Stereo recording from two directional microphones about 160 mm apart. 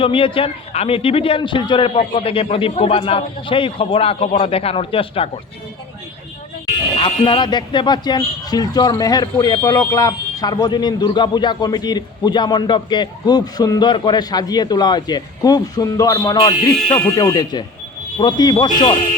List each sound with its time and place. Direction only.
0.0 s a man's voice: 35° left (ahead or behind)
6.9 s speech: 30° left (ahead or behind)